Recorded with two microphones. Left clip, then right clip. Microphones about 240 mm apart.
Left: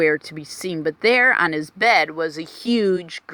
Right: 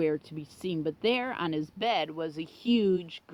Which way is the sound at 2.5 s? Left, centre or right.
Left.